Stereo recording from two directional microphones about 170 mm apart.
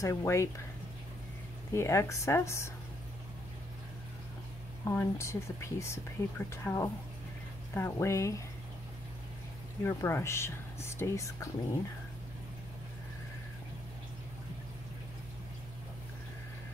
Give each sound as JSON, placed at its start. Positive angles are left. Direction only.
{"t": 0.0, "sound": "speech", "side_deg": 15}
{"t": 1.7, "sound": "speech", "side_deg": 15}
{"t": 4.8, "sound": "speech", "side_deg": 15}
{"t": 9.8, "sound": "speech", "side_deg": 15}